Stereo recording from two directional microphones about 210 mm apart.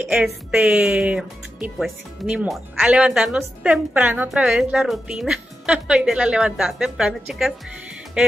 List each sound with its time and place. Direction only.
0.0 s speech: 5° right (ahead or behind)